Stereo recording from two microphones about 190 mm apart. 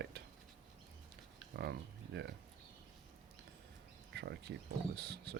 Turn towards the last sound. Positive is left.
turn(degrees=-60)  # may be behind; listen again after turning